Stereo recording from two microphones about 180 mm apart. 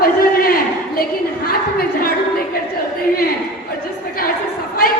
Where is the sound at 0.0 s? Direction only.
55° left (ahead or behind).